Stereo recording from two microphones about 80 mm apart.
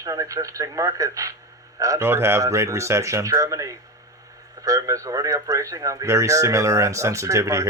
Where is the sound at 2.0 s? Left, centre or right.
Right.